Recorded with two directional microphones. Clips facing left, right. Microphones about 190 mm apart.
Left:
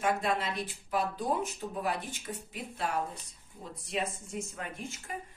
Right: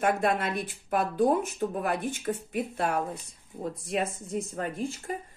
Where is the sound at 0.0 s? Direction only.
55° right (ahead or behind).